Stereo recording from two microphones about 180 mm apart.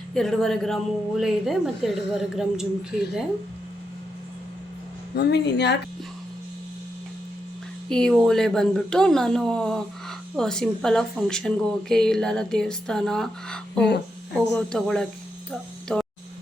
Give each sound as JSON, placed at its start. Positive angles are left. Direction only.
{"t": 0.1, "sound": "speech", "side_deg": 5}
{"t": 5.1, "sound": "speech", "side_deg": 65}
{"t": 7.9, "sound": "speech", "side_deg": 5}